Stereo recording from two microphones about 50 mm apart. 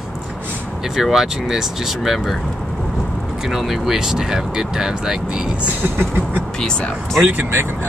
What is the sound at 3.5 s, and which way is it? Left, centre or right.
Speech, centre.